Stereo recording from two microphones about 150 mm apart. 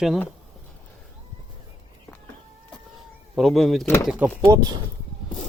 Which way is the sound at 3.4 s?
Centre (ahead or behind).